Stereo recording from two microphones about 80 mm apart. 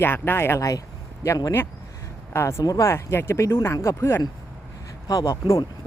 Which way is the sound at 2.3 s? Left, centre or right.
Left.